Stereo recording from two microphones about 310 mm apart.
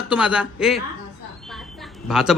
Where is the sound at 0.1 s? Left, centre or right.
Centre.